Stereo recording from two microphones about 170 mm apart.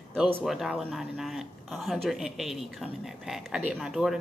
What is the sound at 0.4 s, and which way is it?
A man's voice, 5° right (ahead or behind).